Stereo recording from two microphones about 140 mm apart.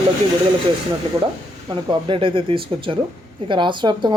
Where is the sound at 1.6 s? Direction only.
35° right (ahead or behind).